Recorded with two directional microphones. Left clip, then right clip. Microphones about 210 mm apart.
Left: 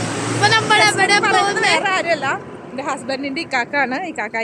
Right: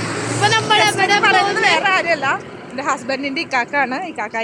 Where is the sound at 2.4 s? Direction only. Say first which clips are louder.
Right 1 dB; 50° right (ahead or behind).